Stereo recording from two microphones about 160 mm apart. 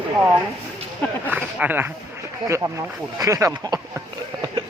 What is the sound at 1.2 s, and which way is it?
Speech, 10° right (ahead or behind).